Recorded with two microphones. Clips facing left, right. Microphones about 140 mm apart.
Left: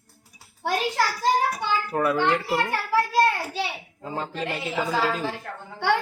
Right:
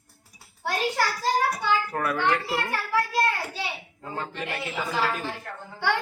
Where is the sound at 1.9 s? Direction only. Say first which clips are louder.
Left 3 dB; 20° left (ahead or behind).